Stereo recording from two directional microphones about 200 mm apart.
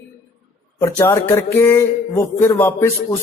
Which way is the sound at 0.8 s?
15° left (ahead or behind).